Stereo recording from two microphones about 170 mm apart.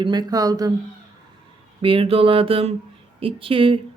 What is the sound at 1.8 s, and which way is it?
Speech, 30° right (ahead or behind).